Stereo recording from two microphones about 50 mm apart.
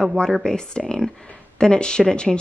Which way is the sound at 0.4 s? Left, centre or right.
Centre.